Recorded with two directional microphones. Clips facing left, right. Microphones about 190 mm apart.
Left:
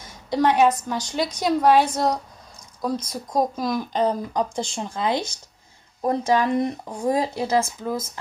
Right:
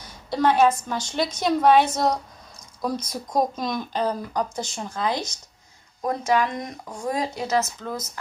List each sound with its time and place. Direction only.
0.3 s a woman's voice: 15° left (ahead or behind)
3.9 s speech: 20° left (ahead or behind)